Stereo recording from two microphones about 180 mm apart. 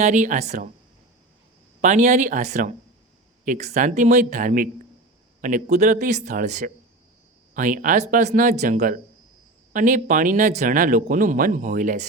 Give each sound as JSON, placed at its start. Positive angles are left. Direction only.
{"t": 0.0, "sound": "speech", "side_deg": -45}
{"t": 1.8, "sound": "speech", "side_deg": -45}